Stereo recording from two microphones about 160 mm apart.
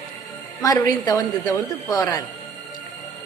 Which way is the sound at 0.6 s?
20° left (ahead or behind).